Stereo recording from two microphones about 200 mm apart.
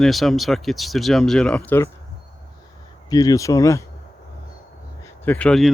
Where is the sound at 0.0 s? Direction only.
Centre (ahead or behind).